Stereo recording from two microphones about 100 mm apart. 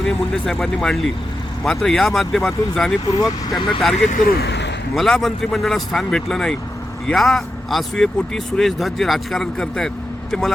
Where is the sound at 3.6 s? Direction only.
55° left (ahead or behind).